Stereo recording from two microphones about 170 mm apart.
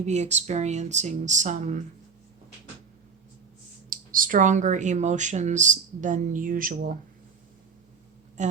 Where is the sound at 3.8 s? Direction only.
55° right (ahead or behind).